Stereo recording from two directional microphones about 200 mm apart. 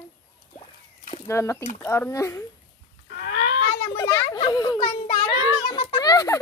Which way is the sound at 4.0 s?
15° left (ahead or behind).